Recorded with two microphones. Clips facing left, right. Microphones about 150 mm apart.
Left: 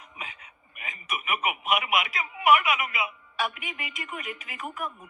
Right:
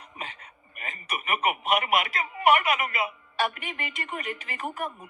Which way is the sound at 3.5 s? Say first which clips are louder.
Right 3 dB; 5° left (ahead or behind).